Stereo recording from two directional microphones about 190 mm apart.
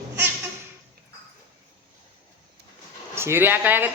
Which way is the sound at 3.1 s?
10° right (ahead or behind).